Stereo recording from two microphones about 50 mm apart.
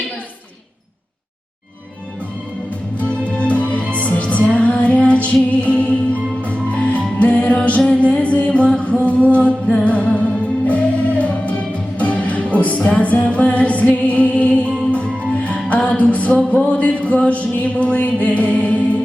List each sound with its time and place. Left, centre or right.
3.0 s music: left